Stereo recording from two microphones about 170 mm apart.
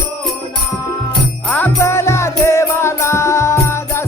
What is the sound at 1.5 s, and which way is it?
Music, 10° left (ahead or behind).